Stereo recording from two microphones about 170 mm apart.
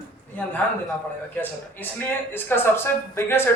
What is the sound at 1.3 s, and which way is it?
Speech, 10° left (ahead or behind).